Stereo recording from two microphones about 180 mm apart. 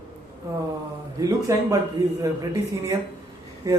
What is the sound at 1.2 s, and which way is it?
A man's voice, 20° right (ahead or behind).